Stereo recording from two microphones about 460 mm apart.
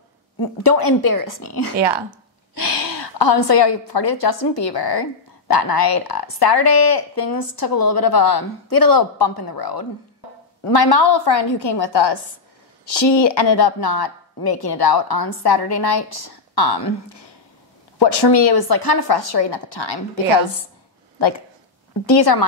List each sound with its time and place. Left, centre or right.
0.4 s a woman's voice: left
1.8 s speech: right
2.5 s a woman's voice: left
22.0 s speech: left